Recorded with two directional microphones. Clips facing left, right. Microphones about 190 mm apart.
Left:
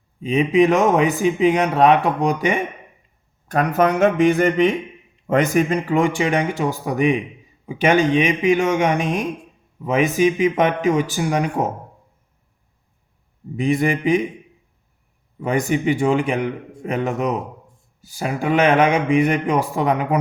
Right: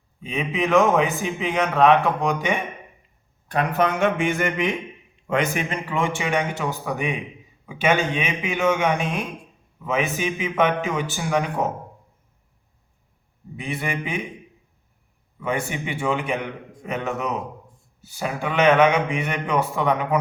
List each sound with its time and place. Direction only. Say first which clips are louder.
0.2 s speech: left 10 dB; 35° left (ahead or behind)
8.1 s speech: left 10 dB; 35° left (ahead or behind)
13.6 s speech: left 9 dB; 40° left (ahead or behind)
15.4 s speech: left 6 dB; 40° left (ahead or behind)
18.0 s speech: left 4 dB; 35° left (ahead or behind)